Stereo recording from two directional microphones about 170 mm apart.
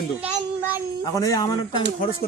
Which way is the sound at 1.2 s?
20° left (ahead or behind).